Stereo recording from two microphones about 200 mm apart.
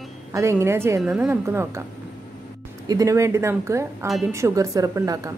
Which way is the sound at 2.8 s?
15° right (ahead or behind).